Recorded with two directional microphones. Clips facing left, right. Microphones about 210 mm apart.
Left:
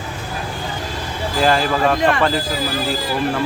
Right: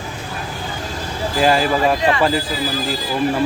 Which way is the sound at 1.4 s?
5° right (ahead or behind).